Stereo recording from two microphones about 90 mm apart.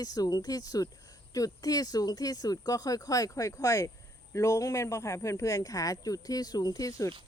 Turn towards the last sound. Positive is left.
turn(degrees=40)  # may be behind; listen again after turning